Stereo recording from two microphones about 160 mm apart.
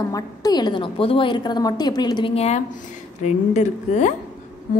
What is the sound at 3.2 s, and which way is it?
Speech, 50° left (ahead or behind).